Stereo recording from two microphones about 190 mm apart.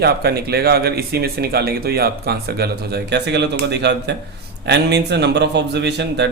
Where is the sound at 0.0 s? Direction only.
55° right (ahead or behind).